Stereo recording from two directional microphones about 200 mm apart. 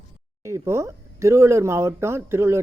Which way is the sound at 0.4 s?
15° right (ahead or behind).